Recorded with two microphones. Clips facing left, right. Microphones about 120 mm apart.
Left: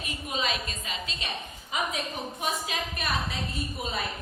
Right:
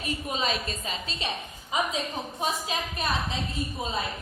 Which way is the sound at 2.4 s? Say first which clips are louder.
Right 2 dB; 30° right (ahead or behind).